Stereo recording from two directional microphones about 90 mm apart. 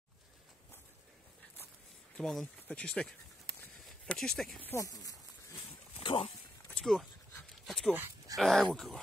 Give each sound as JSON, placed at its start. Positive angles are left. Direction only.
{"t": 2.1, "sound": "speech", "side_deg": 10}
{"t": 4.7, "sound": "speech", "side_deg": 40}
{"t": 5.9, "sound": "dog", "side_deg": 90}
{"t": 6.7, "sound": "dog", "side_deg": 5}
{"t": 8.4, "sound": "speech", "side_deg": 0}